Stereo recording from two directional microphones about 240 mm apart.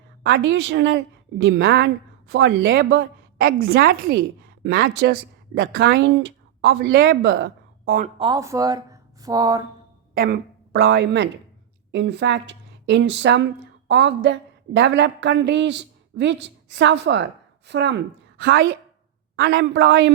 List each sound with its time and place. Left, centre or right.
0.2 s a woman's voice: right
8.2 s speech: centre
10.2 s a woman's voice: right